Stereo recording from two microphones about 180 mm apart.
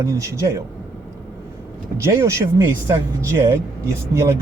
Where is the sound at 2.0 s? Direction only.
15° right (ahead or behind).